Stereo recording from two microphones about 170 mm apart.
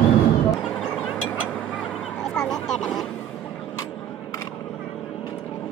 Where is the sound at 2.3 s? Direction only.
5° left (ahead or behind).